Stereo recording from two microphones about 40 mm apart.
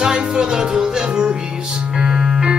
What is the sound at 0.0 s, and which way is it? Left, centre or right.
Music, right.